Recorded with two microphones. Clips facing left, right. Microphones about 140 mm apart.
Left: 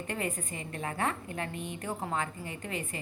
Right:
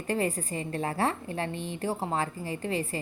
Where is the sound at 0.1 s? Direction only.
35° right (ahead or behind).